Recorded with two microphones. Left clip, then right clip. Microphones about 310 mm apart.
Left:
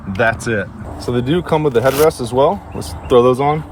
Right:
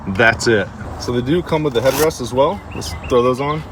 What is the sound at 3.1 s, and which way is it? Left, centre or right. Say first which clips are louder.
Speech: left 4 dB; left.